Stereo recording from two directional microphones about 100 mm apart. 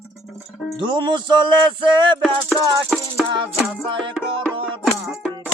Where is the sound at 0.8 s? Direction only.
50° right (ahead or behind).